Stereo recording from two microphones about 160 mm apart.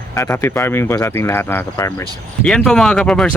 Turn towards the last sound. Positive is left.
turn(degrees=5)  # may be behind; listen again after turning